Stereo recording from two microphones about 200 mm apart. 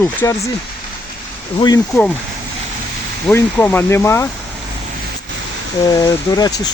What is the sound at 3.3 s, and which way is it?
Speech, 10° left (ahead or behind).